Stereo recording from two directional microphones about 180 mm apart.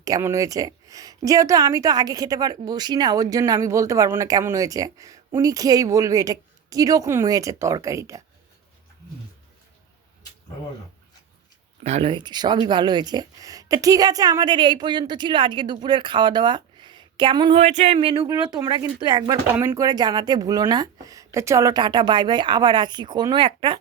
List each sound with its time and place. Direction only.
0.0 s speech: 15° right (ahead or behind)
11.8 s speech: 35° right (ahead or behind)
17.6 s speech: 40° right (ahead or behind)